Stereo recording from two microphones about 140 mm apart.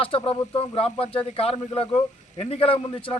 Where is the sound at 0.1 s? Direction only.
45° left (ahead or behind).